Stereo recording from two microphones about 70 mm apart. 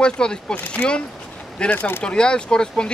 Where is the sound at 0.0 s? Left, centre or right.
Centre.